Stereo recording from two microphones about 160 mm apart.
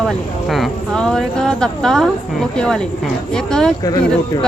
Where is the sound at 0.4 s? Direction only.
Centre (ahead or behind).